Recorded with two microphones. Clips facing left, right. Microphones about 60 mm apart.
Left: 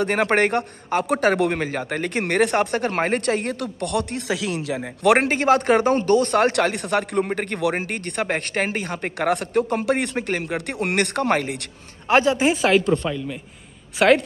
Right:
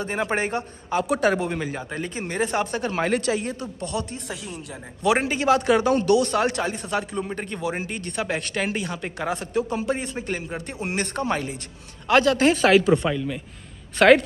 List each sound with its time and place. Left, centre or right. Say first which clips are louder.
0.0 s a man's voice: left 6 dB; left
5.0 s speech: left 3 dB; left
6.5 s a man's voice: left 5 dB; left
12.1 s speech: left 1 dB; left
12.4 s speech: right 1 dB; centre
13.9 s speech: right 1 dB; centre